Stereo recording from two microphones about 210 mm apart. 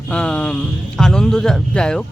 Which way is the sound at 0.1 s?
5° left (ahead or behind).